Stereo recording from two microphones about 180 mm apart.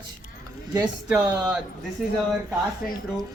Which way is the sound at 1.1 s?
5° right (ahead or behind).